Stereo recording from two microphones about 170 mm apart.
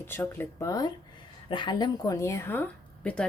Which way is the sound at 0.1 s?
15° left (ahead or behind).